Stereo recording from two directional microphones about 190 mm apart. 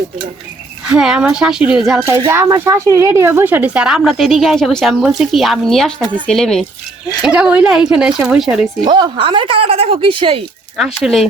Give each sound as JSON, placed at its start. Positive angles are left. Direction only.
{"t": 0.9, "sound": "speech", "side_deg": -5}
{"t": 2.0, "sound": "speech", "side_deg": -15}
{"t": 8.8, "sound": "a woman's voice", "side_deg": -25}
{"t": 10.8, "sound": "speech", "side_deg": 0}